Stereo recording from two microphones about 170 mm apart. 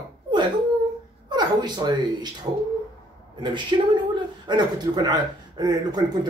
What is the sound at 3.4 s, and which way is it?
Speech, 25° right (ahead or behind).